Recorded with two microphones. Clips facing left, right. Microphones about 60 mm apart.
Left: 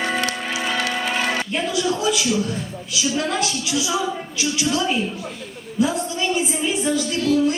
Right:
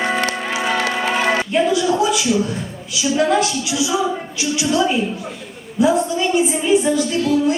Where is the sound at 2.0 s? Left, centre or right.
Centre.